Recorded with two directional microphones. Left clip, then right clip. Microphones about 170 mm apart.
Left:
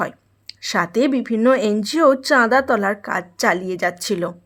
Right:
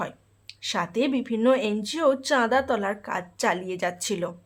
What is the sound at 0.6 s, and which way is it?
Speech, 30° left (ahead or behind).